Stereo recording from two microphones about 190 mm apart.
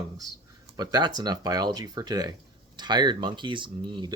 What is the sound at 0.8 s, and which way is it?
Speech, 20° right (ahead or behind).